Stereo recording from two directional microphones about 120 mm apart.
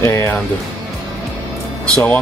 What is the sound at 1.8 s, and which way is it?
Speech, 10° left (ahead or behind).